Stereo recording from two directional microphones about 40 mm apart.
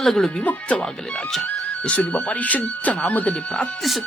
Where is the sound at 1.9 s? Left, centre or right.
Left.